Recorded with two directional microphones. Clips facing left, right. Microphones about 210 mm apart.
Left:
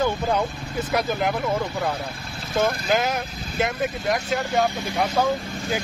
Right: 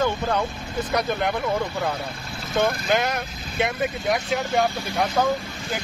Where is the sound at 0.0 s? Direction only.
10° left (ahead or behind).